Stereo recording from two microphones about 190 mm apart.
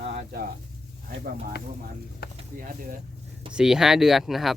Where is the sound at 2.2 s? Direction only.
55° left (ahead or behind).